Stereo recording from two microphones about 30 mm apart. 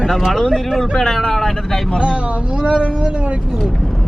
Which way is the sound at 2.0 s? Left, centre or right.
Right.